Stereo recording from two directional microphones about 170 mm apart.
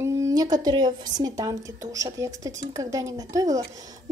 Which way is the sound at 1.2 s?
20° right (ahead or behind).